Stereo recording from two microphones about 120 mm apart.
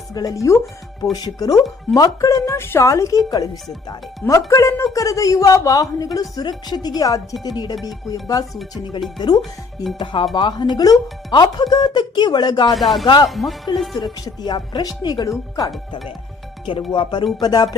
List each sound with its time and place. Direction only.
0.1 s a woman's voice: 30° left (ahead or behind)
12.7 s speech: centre (ahead or behind)
14.0 s speech: 35° left (ahead or behind)
16.9 s speech: 40° left (ahead or behind)